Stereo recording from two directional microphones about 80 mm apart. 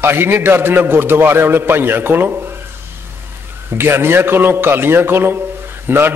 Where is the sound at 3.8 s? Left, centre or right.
Right.